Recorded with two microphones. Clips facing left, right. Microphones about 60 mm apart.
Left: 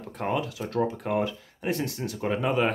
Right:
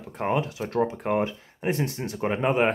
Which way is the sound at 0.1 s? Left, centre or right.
Right.